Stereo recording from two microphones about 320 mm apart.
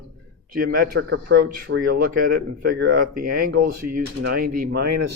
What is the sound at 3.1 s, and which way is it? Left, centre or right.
Speech, right.